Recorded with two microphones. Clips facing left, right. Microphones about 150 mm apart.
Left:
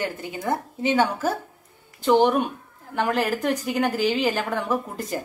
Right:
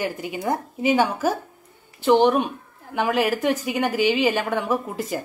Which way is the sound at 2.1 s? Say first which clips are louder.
Right 1 dB; 5° left (ahead or behind).